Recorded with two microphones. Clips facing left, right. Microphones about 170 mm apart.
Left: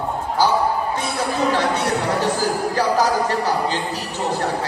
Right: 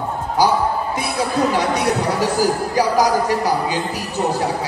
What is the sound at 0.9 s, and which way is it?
Chatter, 10° right (ahead or behind).